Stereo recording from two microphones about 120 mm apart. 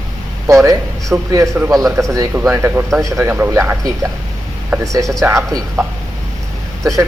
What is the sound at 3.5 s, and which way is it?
Speech, 25° right (ahead or behind).